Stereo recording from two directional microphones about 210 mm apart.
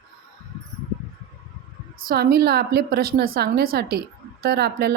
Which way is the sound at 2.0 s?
45° right (ahead or behind).